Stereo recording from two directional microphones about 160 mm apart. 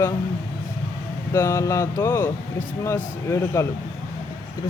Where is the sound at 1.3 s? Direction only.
15° left (ahead or behind).